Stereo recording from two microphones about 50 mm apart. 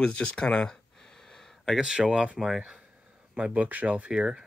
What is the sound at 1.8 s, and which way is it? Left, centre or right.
Speech, centre.